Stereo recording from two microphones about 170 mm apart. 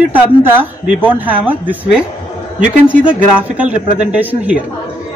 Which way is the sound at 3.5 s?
10° right (ahead or behind).